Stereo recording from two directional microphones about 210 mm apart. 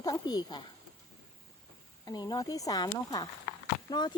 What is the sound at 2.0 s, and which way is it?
Speech, 20° left (ahead or behind).